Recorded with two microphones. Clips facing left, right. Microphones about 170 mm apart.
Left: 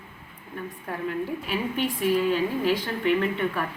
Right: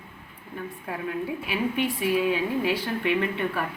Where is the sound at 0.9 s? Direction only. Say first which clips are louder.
Left 1 dB; 5° right (ahead or behind).